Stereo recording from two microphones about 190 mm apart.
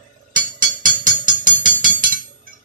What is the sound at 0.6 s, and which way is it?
Music, 45° right (ahead or behind).